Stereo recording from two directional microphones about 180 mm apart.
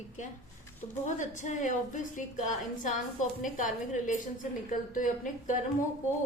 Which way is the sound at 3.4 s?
45° left (ahead or behind).